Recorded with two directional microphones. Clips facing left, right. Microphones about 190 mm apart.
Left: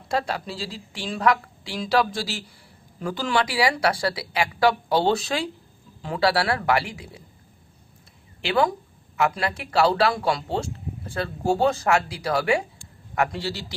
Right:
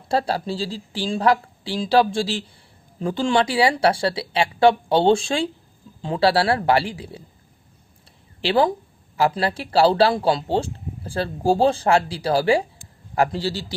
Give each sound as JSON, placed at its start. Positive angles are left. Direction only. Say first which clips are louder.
{"t": 0.1, "sound": "speech", "louder": "right 4 dB", "side_deg": -30}
{"t": 8.4, "sound": "speech", "louder": "right 3 dB", "side_deg": -30}